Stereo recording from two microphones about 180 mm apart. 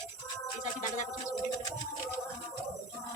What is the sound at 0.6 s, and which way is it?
Music, 45° left (ahead or behind).